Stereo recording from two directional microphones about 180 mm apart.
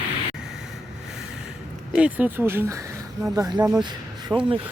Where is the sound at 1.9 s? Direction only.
10° right (ahead or behind).